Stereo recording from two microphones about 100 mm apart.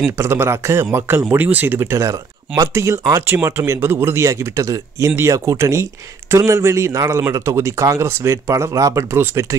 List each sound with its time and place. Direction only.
0.2 s a man's voice: 25° right (ahead or behind)